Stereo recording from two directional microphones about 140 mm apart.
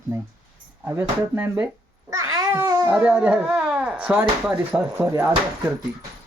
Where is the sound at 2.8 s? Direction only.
5° right (ahead or behind).